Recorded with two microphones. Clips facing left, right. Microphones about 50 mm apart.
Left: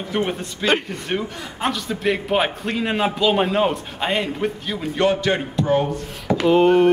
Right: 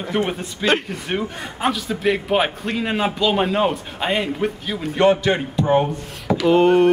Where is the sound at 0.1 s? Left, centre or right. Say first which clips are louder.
Right 1 dB; centre.